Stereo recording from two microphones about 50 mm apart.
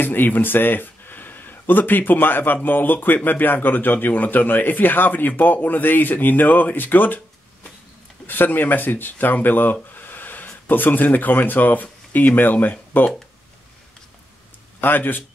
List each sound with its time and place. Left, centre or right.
0.0 s a man's voice: left
8.3 s a man's voice: left
14.8 s a man's voice: left